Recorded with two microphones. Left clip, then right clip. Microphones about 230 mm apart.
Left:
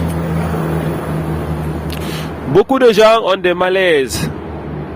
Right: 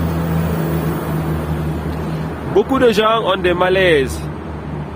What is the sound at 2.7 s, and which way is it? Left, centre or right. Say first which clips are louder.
Speech: left 5 dB; left.